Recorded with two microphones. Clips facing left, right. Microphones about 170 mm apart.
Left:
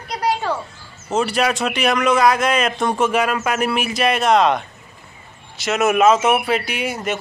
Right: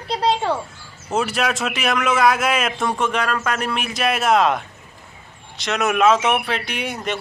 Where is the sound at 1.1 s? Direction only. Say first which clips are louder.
Left 2 dB; centre (ahead or behind).